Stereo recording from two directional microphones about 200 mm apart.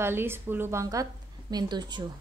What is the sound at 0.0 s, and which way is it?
A woman's voice, 10° right (ahead or behind).